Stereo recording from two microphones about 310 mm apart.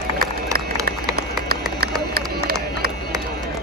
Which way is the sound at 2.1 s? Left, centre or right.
Right.